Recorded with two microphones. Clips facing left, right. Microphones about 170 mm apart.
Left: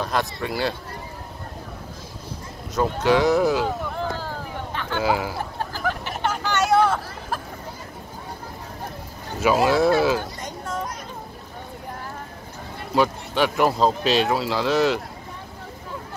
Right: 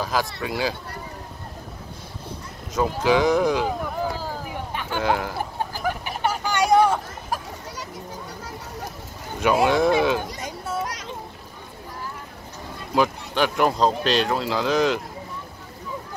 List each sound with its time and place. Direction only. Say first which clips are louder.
0.0 s speech: even; centre (ahead or behind)
2.7 s a sound: left 1 dB; centre (ahead or behind)
5.0 s speech: left 1 dB; 5° left (ahead or behind)
5.6 s hubbub: even; 15° right (ahead or behind)
9.4 s speech: left 1 dB; 5° left (ahead or behind)
10.4 s children playing: right 1 dB; 10° right (ahead or behind)
10.9 s splash: right 1 dB; 85° right
12.9 s speech: left 1 dB; centre (ahead or behind)